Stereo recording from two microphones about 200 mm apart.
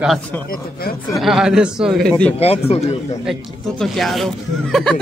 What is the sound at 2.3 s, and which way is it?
Speech, 30° left (ahead or behind).